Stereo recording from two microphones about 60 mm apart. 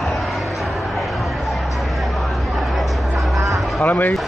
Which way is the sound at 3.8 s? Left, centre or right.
Left.